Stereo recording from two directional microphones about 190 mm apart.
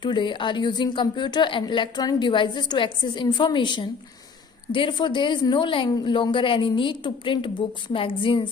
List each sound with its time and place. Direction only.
0.0 s a woman's voice: 25° left (ahead or behind)